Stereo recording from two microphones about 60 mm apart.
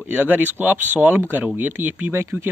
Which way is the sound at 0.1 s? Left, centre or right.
Right.